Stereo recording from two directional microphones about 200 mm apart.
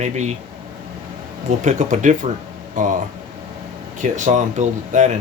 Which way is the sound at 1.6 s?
35° right (ahead or behind).